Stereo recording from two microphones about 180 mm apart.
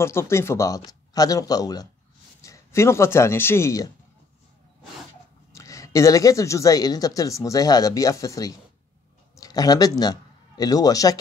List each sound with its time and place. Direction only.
0.0 s a woman's voice: 15° left (ahead or behind)
5.5 s a woman's voice: 20° left (ahead or behind)